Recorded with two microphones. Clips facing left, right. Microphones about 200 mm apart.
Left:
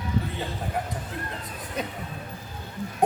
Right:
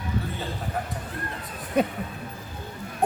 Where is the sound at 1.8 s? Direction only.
55° right (ahead or behind).